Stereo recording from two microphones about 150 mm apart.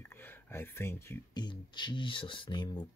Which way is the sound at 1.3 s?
30° left (ahead or behind).